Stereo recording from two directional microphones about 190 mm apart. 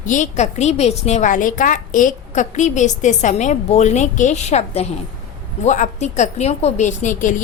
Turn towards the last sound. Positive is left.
turn(degrees=40)  # may be behind; listen again after turning